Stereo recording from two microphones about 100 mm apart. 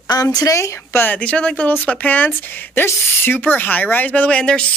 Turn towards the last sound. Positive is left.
turn(degrees=10)  # may be behind; listen again after turning